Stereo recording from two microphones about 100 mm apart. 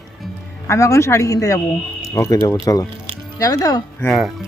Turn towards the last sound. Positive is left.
turn(degrees=0)  # may be behind; listen again after turning